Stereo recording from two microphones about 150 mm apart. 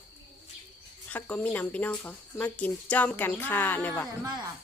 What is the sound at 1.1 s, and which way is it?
Speech, 10° left (ahead or behind).